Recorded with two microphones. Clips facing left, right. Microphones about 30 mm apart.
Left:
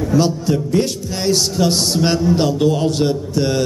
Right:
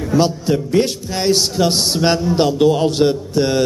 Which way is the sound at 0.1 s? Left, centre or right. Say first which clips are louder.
Right 2 dB; right.